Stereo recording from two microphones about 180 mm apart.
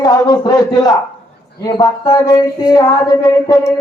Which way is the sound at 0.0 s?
20° left (ahead or behind).